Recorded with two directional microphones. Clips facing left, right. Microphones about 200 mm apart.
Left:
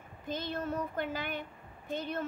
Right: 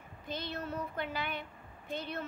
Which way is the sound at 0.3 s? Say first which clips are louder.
Left 4 dB; 50° left (ahead or behind).